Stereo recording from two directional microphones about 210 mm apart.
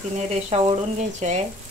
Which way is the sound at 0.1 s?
30° right (ahead or behind).